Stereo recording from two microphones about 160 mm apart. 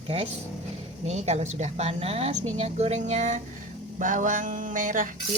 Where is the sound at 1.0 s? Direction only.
45° right (ahead or behind).